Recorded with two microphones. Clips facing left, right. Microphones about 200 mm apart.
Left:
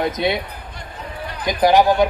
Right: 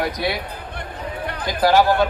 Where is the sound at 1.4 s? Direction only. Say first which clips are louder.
Left 2 dB; 20° left (ahead or behind).